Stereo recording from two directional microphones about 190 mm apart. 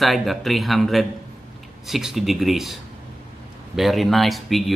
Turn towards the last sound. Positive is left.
turn(degrees=0)  # may be behind; listen again after turning